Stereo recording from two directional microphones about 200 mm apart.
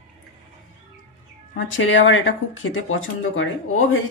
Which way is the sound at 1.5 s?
70° left (ahead or behind).